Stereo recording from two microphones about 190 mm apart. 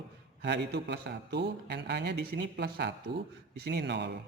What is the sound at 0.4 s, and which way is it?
Speech, 65° right (ahead or behind).